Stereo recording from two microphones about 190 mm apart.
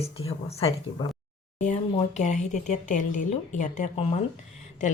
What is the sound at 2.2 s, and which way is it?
Speech, 40° left (ahead or behind).